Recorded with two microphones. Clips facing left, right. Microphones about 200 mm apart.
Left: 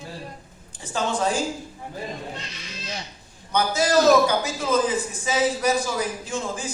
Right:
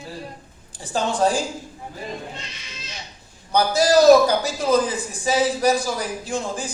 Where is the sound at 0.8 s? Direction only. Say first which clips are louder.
Right 4 dB; 35° right (ahead or behind).